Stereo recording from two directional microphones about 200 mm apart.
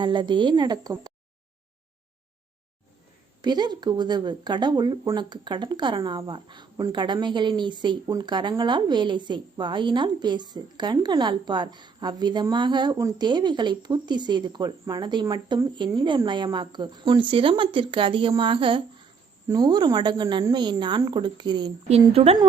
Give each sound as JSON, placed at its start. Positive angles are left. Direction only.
{"t": 0.0, "sound": "speech", "side_deg": -25}
{"t": 3.4, "sound": "speech", "side_deg": -20}